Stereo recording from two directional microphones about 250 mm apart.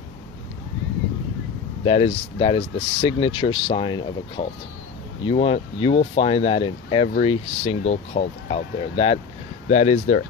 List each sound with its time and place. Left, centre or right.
1.9 s speech: left